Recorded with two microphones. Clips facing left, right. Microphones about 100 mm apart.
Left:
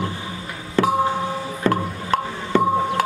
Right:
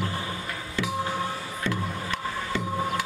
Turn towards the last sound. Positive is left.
turn(degrees=50)  # may be behind; listen again after turning